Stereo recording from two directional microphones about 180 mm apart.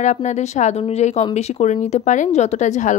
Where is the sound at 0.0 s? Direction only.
40° left (ahead or behind).